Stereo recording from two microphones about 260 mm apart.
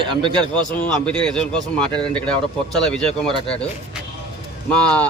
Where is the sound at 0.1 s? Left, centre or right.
Centre.